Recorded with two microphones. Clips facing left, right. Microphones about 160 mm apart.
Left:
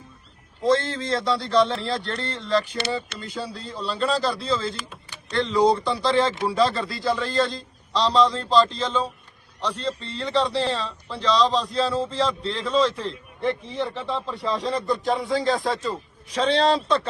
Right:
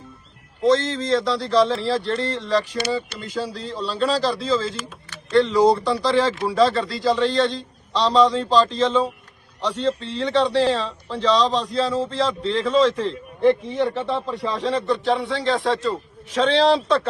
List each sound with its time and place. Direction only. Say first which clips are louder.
0.6 s a man's voice: right 3 dB; centre (ahead or behind)